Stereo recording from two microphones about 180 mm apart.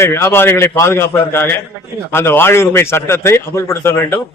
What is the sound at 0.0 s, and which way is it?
A man's voice, 15° left (ahead or behind).